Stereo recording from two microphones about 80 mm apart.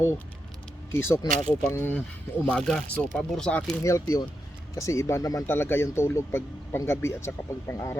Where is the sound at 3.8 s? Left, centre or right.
Left.